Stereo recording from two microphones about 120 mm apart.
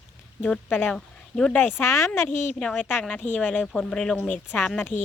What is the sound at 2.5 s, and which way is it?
Speech, 5° left (ahead or behind).